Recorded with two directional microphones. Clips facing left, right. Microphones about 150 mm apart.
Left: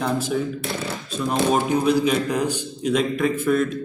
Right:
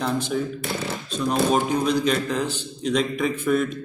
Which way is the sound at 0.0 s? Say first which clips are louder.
Left 2 dB; centre (ahead or behind).